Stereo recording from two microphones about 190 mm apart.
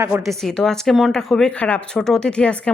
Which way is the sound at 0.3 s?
Centre (ahead or behind).